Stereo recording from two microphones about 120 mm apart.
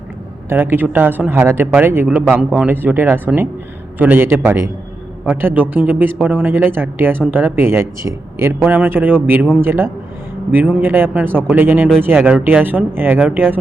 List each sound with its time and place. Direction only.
0.4 s a man's voice: 20° right (ahead or behind)